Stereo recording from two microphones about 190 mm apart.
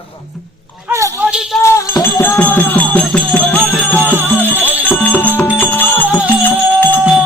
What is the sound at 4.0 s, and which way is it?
Music, 10° right (ahead or behind).